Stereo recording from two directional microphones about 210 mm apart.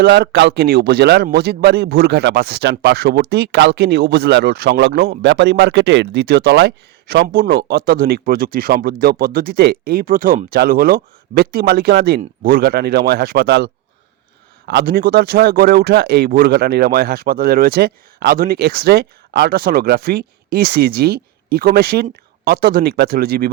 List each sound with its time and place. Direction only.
0.0 s a man's voice: 45° right (ahead or behind)
14.7 s a man's voice: 50° right (ahead or behind)